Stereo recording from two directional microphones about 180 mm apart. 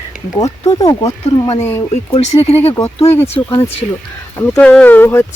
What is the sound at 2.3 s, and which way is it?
Speech, 35° left (ahead or behind).